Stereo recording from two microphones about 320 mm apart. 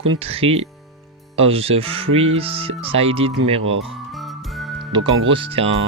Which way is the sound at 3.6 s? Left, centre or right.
Right.